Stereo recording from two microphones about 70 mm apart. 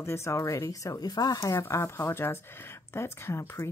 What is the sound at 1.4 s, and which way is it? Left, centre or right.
Speech, left.